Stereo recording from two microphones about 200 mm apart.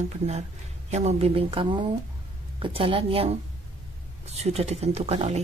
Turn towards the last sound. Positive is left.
turn(degrees=-30)  # may be behind; listen again after turning